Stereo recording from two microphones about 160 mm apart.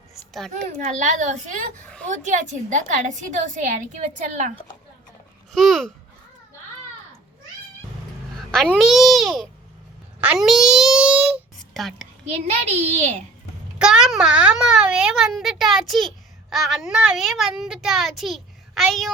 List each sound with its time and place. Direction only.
0.1 s a sound: centre (ahead or behind)
0.5 s a woman's voice: 50° right (ahead or behind)
5.5 s speech: centre (ahead or behind)
8.6 s a child's voice: 5° right (ahead or behind)
10.2 s a sound: 5° right (ahead or behind)
12.6 s a woman's voice: 45° right (ahead or behind)
13.7 s a child's voice: 5° right (ahead or behind)